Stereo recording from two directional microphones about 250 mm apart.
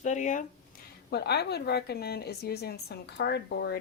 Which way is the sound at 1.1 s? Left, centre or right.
Left.